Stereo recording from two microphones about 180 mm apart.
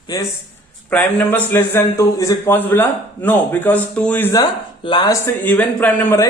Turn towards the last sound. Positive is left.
turn(degrees=10)  # may be behind; listen again after turning